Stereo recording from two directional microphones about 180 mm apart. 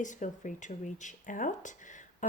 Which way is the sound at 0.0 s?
45° left (ahead or behind).